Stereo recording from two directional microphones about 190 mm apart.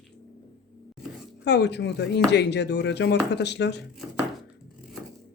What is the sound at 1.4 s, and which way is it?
Speech, 65° left (ahead or behind).